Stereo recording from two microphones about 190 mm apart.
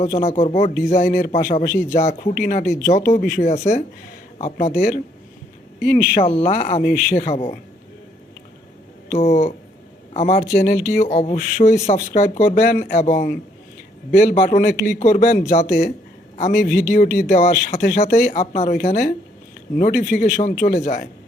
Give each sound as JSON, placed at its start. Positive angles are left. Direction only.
{"t": 0.0, "sound": "speech", "side_deg": 40}
{"t": 5.8, "sound": "speech", "side_deg": 45}
{"t": 6.3, "sound": "speech", "side_deg": 30}
{"t": 6.8, "sound": "speech", "side_deg": 45}
{"t": 9.1, "sound": "speech", "side_deg": 35}
{"t": 17.7, "sound": "speech", "side_deg": 55}
{"t": 18.0, "sound": "speech", "side_deg": 35}